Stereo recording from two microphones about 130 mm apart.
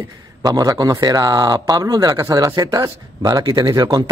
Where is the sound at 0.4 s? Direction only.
30° right (ahead or behind).